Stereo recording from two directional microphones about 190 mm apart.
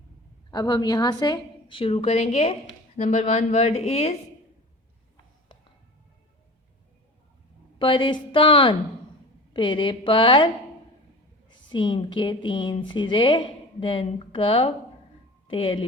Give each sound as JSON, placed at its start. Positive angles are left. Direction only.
{"t": 0.5, "sound": "a woman's voice", "side_deg": 20}
{"t": 7.8, "sound": "speech", "side_deg": 25}
{"t": 11.7, "sound": "speech", "side_deg": 25}